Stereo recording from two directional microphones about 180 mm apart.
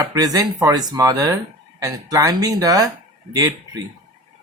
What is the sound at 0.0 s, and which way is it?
Speech, 20° right (ahead or behind).